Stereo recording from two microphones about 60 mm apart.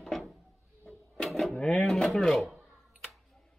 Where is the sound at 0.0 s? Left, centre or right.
Centre.